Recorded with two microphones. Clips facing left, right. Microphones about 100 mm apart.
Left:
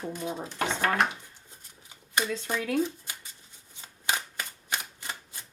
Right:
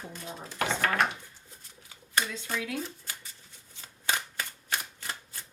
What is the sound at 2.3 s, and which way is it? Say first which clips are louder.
Speech: left 6 dB; 50° left (ahead or behind).